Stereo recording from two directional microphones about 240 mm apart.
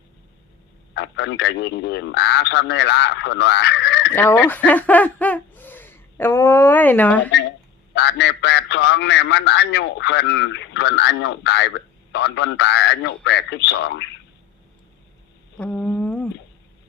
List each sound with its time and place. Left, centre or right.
0.9 s a man's voice: left
4.1 s speech: centre
7.9 s a man's voice: left
15.5 s a sound: centre